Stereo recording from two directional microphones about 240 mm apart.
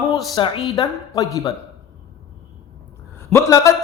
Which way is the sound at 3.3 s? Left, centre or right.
Centre.